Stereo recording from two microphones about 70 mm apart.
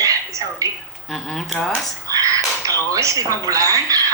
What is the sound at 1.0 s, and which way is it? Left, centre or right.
Speech, centre.